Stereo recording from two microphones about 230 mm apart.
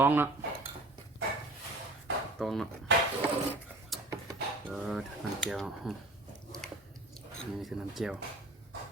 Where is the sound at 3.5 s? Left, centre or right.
Centre.